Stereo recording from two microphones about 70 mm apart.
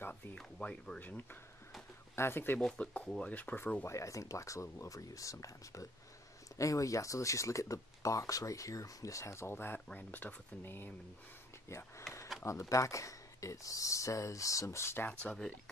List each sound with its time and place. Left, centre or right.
0.6 s speech: centre
2.8 s speech: centre
3.3 s speech: left
3.8 s speech: left
15.0 s speech: centre